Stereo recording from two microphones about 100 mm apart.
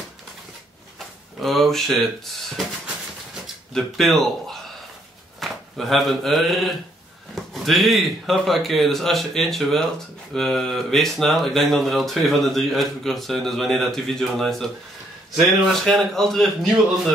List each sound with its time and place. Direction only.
0.9 s speech: centre (ahead or behind)
3.7 s speech: centre (ahead or behind)